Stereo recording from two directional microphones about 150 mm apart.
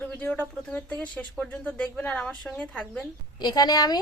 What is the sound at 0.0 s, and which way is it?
A woman's voice, 10° left (ahead or behind).